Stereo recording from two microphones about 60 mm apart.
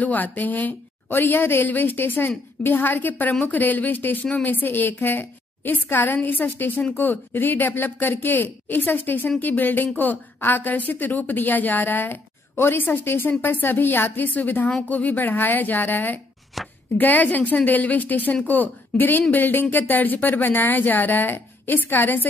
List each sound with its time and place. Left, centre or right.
0.0 s a woman's voice: left
16.6 s speech: centre
16.9 s a woman's voice: left